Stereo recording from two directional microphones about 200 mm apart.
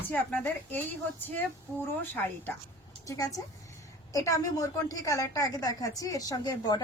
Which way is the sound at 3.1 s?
20° left (ahead or behind).